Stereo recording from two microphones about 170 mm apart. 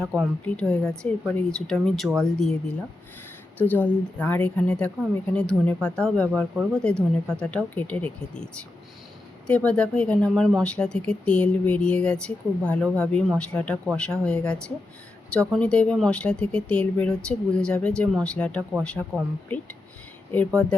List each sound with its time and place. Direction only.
0.0 s speech: 5° left (ahead or behind)
3.6 s speech: 10° left (ahead or behind)
9.5 s speech: 5° left (ahead or behind)